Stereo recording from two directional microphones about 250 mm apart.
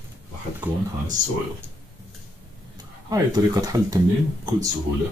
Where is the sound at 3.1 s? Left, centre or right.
Centre.